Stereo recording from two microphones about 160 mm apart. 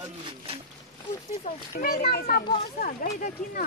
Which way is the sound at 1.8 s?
75° left (ahead or behind).